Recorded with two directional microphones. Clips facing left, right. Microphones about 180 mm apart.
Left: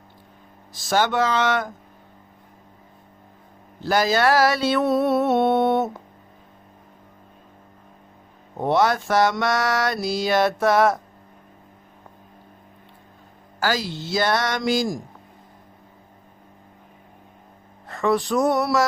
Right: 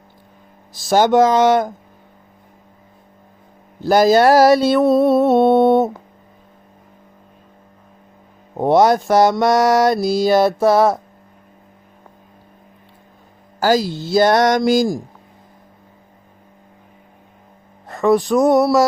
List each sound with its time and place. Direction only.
0.9 s music: 45° right (ahead or behind)
3.8 s mantra: 40° right (ahead or behind)
8.5 s mantra: 40° right (ahead or behind)
13.6 s mantra: 40° right (ahead or behind)
17.8 s music: 45° right (ahead or behind)